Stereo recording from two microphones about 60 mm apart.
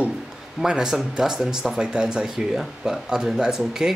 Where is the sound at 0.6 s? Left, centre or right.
Centre.